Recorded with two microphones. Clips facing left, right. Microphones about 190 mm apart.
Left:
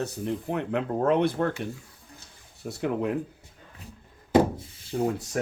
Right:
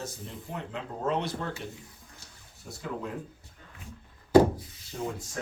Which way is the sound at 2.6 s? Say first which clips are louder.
Left 9 dB; 65° left (ahead or behind).